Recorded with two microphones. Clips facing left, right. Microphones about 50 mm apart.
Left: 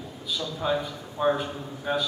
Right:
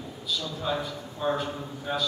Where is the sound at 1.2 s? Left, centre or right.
Left.